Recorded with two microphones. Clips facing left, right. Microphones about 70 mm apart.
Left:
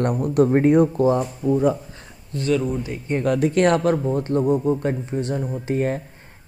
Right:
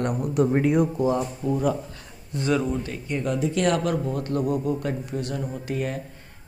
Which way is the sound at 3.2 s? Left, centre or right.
Left.